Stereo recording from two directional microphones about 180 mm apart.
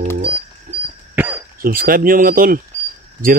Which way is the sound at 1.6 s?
55° right (ahead or behind).